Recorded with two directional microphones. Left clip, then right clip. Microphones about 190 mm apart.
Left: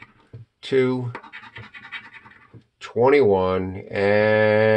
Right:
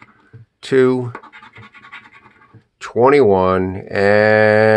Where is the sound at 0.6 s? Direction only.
45° right (ahead or behind).